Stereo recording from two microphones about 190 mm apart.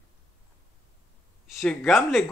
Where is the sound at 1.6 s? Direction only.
Centre (ahead or behind).